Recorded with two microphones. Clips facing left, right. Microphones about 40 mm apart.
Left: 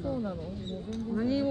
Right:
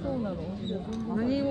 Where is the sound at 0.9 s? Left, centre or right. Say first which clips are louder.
Even; right.